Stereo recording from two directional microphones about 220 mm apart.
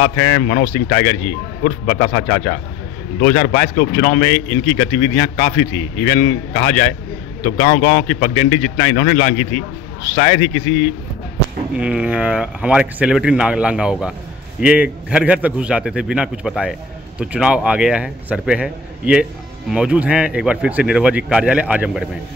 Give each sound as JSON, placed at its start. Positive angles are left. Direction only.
{"t": 0.0, "sound": "a man's voice", "side_deg": 45}
{"t": 11.7, "sound": "speech", "side_deg": -5}